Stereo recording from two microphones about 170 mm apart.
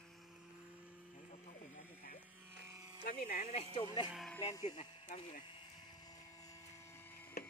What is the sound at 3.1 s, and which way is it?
Speech, 45° left (ahead or behind).